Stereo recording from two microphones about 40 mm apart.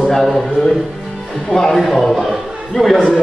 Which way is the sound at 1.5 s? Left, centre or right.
Centre.